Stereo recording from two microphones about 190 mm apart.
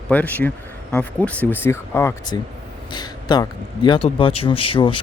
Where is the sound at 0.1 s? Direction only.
10° left (ahead or behind).